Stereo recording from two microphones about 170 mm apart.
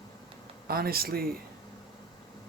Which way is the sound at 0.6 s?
65° right (ahead or behind).